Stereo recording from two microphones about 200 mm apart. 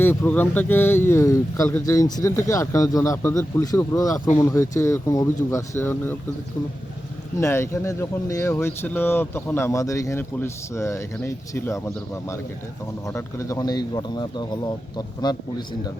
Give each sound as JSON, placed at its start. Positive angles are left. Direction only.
{"t": 0.0, "sound": "speech", "side_deg": 10}
{"t": 7.3, "sound": "a man's voice", "side_deg": 15}